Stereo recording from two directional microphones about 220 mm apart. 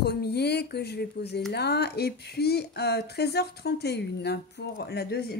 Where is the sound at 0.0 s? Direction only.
45° left (ahead or behind).